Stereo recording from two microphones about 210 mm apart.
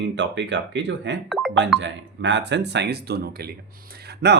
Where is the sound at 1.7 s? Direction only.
60° right (ahead or behind).